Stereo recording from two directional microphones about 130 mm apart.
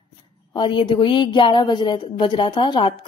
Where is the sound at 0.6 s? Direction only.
35° left (ahead or behind).